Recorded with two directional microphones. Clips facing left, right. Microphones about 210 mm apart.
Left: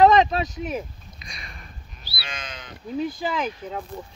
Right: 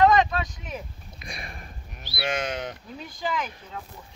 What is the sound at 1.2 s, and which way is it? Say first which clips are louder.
Sniff: right 5 dB; 55° right (ahead or behind).